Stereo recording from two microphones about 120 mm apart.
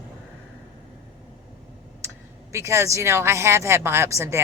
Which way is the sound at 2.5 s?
25° right (ahead or behind).